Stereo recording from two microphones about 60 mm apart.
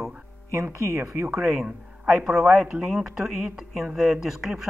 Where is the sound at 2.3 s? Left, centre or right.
Centre.